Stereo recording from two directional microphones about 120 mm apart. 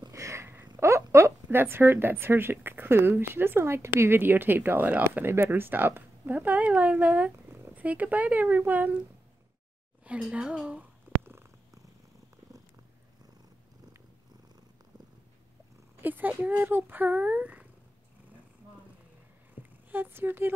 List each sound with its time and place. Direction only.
0.1 s a sound: 25° right (ahead or behind)
0.7 s a woman's voice: 25° right (ahead or behind)
10.0 s purr: 10° right (ahead or behind)
16.0 s a woman's voice: 15° right (ahead or behind)
19.9 s a woman's voice: 20° right (ahead or behind)